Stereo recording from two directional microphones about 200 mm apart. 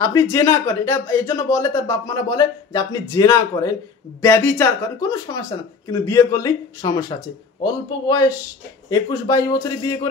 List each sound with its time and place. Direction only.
0.0 s speech: 15° left (ahead or behind)